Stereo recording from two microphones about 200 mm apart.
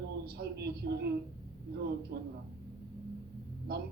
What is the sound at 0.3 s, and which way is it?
Speech, 55° right (ahead or behind).